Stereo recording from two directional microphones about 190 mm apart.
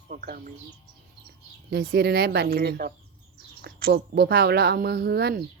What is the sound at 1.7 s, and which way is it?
Speech, 55° right (ahead or behind).